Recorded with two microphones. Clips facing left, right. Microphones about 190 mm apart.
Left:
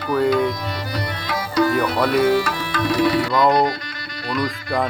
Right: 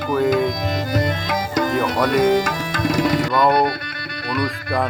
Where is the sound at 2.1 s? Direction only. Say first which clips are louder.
Right 2 dB; 45° right (ahead or behind).